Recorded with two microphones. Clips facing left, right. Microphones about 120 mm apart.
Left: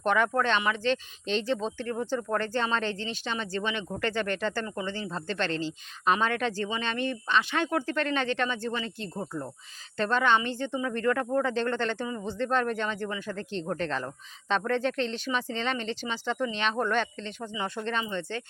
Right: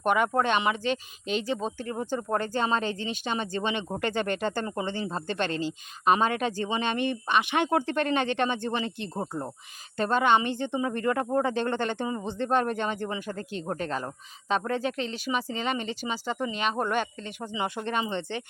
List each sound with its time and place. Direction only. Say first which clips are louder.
0.0 s speech: right 1 dB; 10° right (ahead or behind)
4.6 s speech: right 2 dB; 30° right (ahead or behind)
4.9 s speech: right 2 dB; 15° right (ahead or behind)
10.0 s speech: right 2 dB; 15° right (ahead or behind)